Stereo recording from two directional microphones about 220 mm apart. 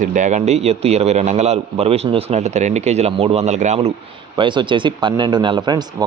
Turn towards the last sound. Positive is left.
turn(degrees=-20)  # may be behind; listen again after turning